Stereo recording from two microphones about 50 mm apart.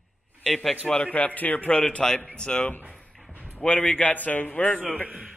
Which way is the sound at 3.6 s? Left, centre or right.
Left.